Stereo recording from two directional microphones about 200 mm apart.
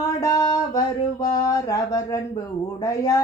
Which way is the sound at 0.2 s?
15° left (ahead or behind).